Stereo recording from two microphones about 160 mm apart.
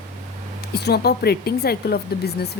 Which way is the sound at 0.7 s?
85° left.